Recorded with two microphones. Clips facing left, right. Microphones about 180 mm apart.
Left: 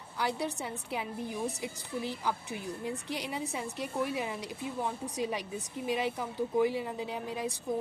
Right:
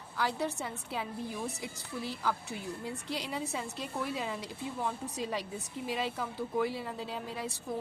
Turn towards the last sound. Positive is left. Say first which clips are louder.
# left 3 dB
turn(degrees=15)  # may be behind; listen again after turning